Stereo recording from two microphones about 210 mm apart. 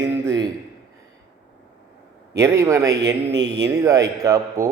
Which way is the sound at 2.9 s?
55° right (ahead or behind).